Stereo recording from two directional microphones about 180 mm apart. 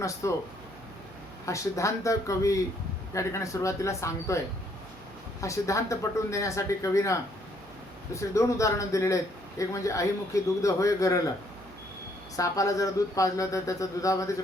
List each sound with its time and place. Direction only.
0.0 s a man's voice: 15° left (ahead or behind)
1.5 s a man's voice: 15° left (ahead or behind)
5.4 s a man's voice: 15° left (ahead or behind)
12.4 s a man's voice: 20° left (ahead or behind)